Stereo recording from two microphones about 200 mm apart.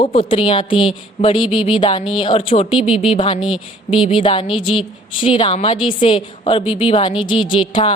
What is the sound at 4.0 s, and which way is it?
A woman's voice, 25° left (ahead or behind).